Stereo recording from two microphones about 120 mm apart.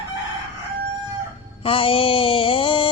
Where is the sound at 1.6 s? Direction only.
50° left (ahead or behind).